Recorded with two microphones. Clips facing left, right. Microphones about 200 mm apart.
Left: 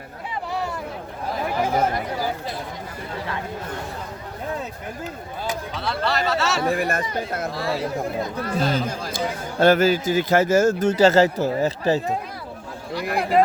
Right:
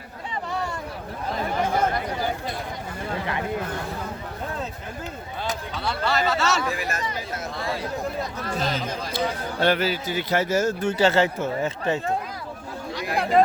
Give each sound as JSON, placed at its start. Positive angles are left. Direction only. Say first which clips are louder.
{"t": 0.5, "sound": "vehicle", "louder": "left 2 dB", "side_deg": 5}
{"t": 1.3, "sound": "chatter", "louder": "left 2 dB", "side_deg": 5}
{"t": 5.5, "sound": "speech", "louder": "left 2 dB", "side_deg": 0}
{"t": 6.6, "sound": "speech", "louder": "left 5 dB", "side_deg": 55}
{"t": 8.2, "sound": "speech", "louder": "left 4 dB", "side_deg": 0}
{"t": 9.6, "sound": "speech", "louder": "left 7 dB", "side_deg": 45}